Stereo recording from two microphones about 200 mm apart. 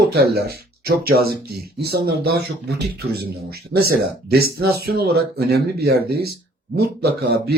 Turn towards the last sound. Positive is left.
turn(degrees=-55)  # may be behind; listen again after turning